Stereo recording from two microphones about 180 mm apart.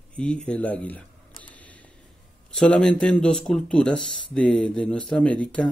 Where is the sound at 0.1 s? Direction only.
5° left (ahead or behind).